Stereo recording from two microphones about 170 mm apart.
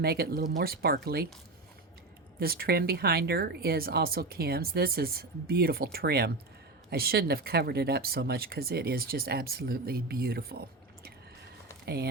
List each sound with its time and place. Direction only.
0.0 s speech: 65° right (ahead or behind)
2.4 s speech: 65° right (ahead or behind)